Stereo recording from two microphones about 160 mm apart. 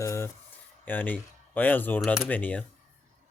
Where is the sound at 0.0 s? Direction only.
20° left (ahead or behind).